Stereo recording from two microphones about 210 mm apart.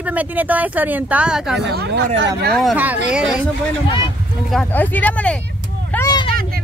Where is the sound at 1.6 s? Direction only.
50° right (ahead or behind).